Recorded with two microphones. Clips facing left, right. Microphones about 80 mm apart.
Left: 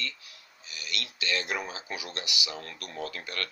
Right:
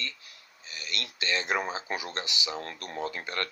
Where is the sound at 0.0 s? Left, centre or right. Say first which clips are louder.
Left 1 dB; right.